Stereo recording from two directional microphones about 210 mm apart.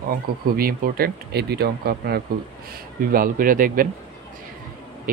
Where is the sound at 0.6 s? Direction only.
45° right (ahead or behind).